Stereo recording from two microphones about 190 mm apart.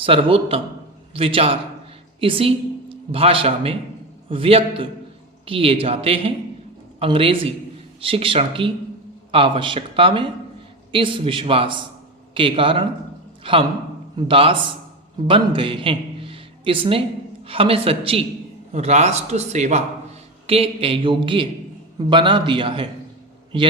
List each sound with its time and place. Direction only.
0.0 s a man's voice: 30° right (ahead or behind)